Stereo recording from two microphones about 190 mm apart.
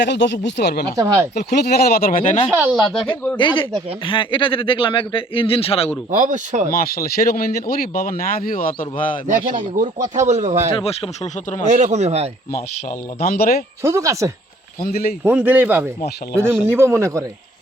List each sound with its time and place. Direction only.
0.0 s speech: 65° left (ahead or behind)
0.9 s a man's voice: 15° right (ahead or behind)
1.4 s speech: 60° left (ahead or behind)
2.5 s speech: 10° right (ahead or behind)
3.3 s speech: 25° left (ahead or behind)
6.1 s speech: 40° right (ahead or behind)
6.7 s speech: 50° left (ahead or behind)
9.2 s speech: 40° right (ahead or behind)
10.8 s speech: 30° left (ahead or behind)
11.6 s speech: 40° right (ahead or behind)
13.1 s speech: 50° left (ahead or behind)
13.8 s a man's voice: 15° right (ahead or behind)